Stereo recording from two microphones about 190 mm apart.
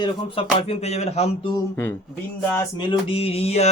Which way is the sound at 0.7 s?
35° left (ahead or behind).